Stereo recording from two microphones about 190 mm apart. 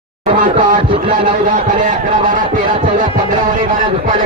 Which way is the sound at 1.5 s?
45° right (ahead or behind).